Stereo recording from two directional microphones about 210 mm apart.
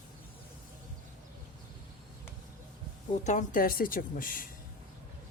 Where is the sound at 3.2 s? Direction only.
40° left (ahead or behind).